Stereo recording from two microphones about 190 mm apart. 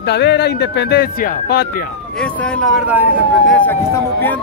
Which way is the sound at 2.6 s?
5° right (ahead or behind).